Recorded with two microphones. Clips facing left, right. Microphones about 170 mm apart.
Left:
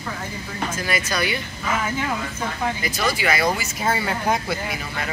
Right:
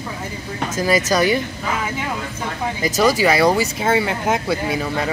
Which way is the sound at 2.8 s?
40° right (ahead or behind).